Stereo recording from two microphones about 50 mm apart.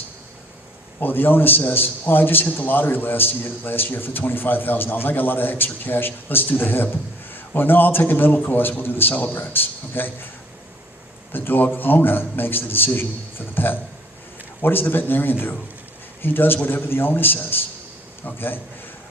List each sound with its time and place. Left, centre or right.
0.9 s a man's voice: left
11.3 s a man's voice: left